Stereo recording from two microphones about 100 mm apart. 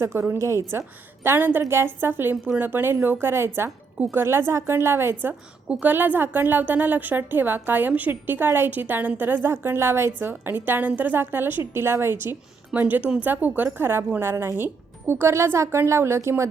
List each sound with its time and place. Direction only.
0.0 s a woman's voice: 25° right (ahead or behind)